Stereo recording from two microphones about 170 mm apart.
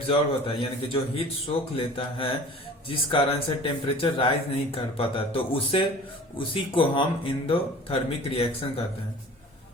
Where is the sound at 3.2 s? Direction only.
30° left (ahead or behind).